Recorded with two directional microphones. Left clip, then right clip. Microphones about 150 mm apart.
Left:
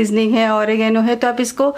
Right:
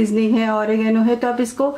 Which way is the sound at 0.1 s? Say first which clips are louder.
Left 3 dB; 35° left (ahead or behind).